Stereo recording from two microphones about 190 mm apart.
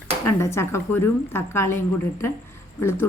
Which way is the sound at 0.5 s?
15° left (ahead or behind).